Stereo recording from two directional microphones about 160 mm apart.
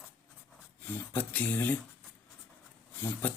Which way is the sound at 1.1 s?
10° left (ahead or behind).